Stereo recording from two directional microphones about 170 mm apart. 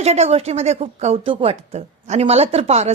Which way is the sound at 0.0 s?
40° right (ahead or behind).